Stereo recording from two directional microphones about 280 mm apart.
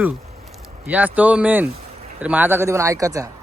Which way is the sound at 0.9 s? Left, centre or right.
Centre.